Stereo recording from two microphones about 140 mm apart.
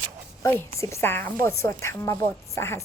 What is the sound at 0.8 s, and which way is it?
A woman's voice, 20° left (ahead or behind).